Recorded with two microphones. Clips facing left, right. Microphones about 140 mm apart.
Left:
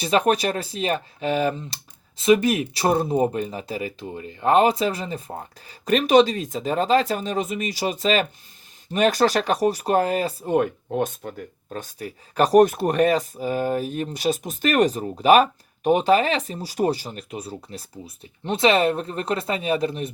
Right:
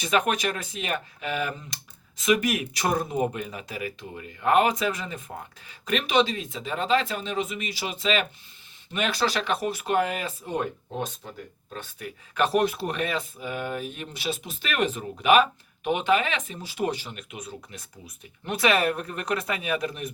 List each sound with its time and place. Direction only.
0.0 s speech: 35° left (ahead or behind)
10.5 s speech: 55° left (ahead or behind); by 20.1 s 30° left (ahead or behind)